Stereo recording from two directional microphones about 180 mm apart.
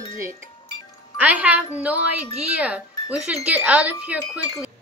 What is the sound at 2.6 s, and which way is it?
Speech, 5° right (ahead or behind).